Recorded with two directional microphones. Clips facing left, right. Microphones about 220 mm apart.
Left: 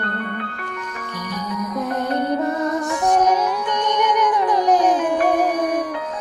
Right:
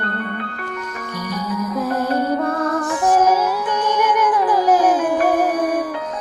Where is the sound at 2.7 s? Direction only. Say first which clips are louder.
Right 1 dB; centre (ahead or behind).